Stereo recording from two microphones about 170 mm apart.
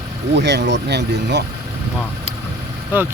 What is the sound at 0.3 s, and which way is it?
Speech, 85° right.